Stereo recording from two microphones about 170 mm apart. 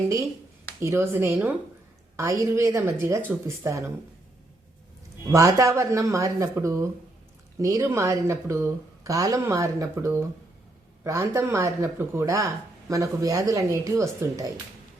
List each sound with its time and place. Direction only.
0.8 s speech: 15° right (ahead or behind)
5.3 s speech: 20° right (ahead or behind)